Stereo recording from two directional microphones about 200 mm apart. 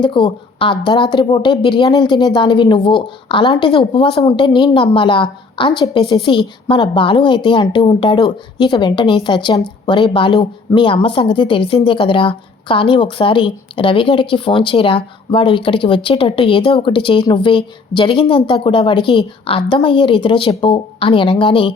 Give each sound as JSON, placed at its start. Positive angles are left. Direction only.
{"t": 0.0, "sound": "a woman's voice", "side_deg": 25}